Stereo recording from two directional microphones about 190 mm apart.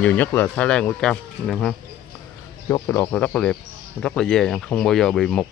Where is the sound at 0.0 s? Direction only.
10° left (ahead or behind).